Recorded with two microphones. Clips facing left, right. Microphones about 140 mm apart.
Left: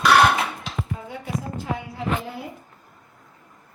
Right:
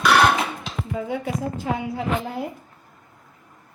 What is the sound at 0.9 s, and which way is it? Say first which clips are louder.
Speech: right 9 dB; 90° right.